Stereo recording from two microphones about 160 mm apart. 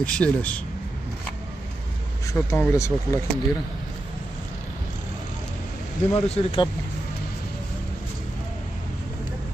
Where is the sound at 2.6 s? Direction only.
15° left (ahead or behind).